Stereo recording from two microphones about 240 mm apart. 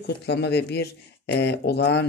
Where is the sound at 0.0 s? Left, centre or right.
Left.